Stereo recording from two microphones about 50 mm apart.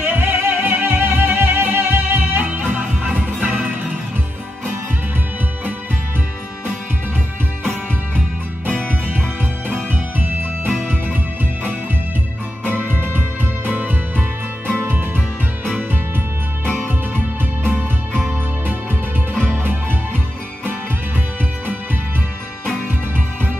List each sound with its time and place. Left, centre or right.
0.0 s music: right
2.5 s music: right
10.1 s music: right
13.0 s music: right
16.6 s music: right
19.6 s music: right